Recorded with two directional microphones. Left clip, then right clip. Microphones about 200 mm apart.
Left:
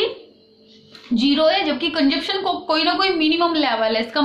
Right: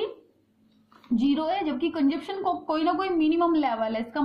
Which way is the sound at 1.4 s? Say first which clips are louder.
Left 9 dB; 45° right (ahead or behind).